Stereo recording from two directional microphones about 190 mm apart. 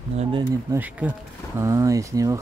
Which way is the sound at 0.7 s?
10° right (ahead or behind).